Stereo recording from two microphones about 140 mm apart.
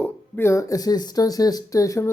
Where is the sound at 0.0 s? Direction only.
15° left (ahead or behind).